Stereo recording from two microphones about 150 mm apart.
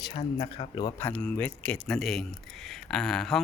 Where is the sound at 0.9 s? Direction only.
10° left (ahead or behind).